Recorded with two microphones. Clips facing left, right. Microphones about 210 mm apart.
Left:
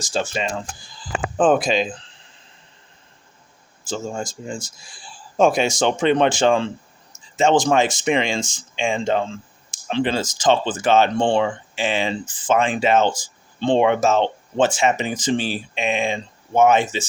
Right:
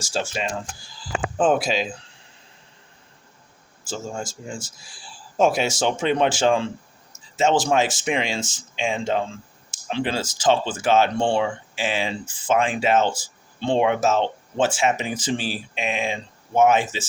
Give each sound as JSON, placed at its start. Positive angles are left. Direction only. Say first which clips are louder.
{"t": 0.0, "sound": "speech", "louder": "left 3 dB", "side_deg": -10}
{"t": 3.8, "sound": "speech", "louder": "left 3 dB", "side_deg": -5}